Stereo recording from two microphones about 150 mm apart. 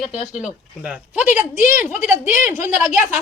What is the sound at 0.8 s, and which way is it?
A woman's voice, 10° right (ahead or behind).